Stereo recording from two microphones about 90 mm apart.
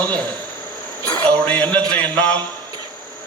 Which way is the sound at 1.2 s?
15° left (ahead or behind).